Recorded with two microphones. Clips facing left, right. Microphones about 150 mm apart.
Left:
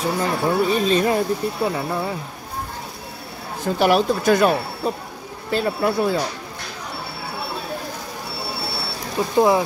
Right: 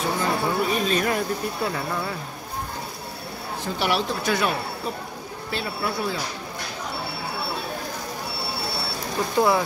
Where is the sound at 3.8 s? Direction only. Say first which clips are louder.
Left 8 dB; 45° left (ahead or behind).